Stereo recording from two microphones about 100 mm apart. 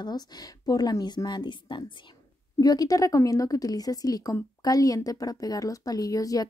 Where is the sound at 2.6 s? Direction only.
40° left (ahead or behind).